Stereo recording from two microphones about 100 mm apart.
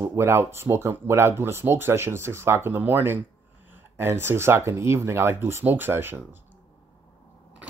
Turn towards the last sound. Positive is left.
turn(degrees=-20)  # may be behind; listen again after turning